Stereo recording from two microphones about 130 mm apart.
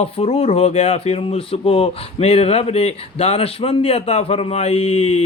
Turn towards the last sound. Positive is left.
turn(degrees=55)  # may be behind; listen again after turning